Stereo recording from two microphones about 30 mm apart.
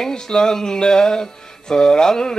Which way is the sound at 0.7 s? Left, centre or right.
Left.